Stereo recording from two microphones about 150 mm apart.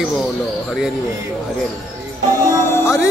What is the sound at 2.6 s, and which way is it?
Music, 15° left (ahead or behind).